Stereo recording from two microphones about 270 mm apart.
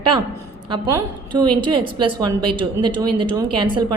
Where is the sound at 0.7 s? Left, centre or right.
Centre.